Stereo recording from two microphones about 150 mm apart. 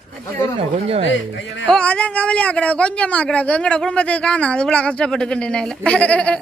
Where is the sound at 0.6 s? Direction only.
40° right (ahead or behind).